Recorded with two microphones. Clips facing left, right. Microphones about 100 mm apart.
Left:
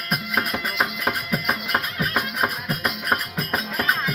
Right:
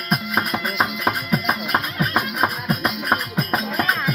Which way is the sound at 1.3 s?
20° right (ahead or behind).